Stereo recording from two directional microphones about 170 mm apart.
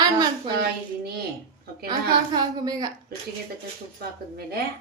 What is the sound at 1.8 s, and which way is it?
Speech, 25° right (ahead or behind).